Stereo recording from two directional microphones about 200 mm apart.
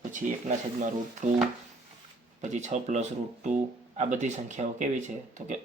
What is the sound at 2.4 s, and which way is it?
Speech, 35° right (ahead or behind).